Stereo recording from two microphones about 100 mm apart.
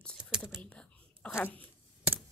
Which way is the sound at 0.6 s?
10° left (ahead or behind).